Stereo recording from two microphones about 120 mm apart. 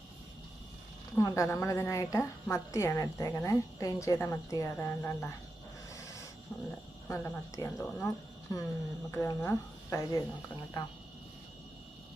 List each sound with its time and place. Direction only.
1.2 s a woman's voice: 30° left (ahead or behind)
5.9 s a sound: 25° left (ahead or behind)
6.5 s speech: 5° left (ahead or behind)
7.1 s a woman's voice: 25° left (ahead or behind)
9.1 s a woman's voice: 20° left (ahead or behind)